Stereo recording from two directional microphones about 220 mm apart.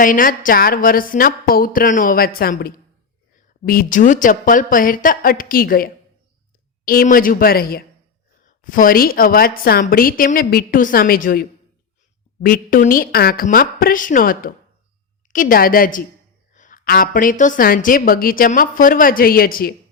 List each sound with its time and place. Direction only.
0.0 s a woman's voice: 40° left (ahead or behind)